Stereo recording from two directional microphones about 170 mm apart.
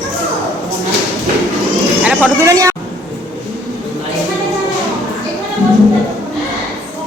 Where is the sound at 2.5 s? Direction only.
20° right (ahead or behind).